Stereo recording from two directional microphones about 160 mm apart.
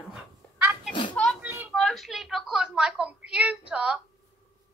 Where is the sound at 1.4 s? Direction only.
10° right (ahead or behind).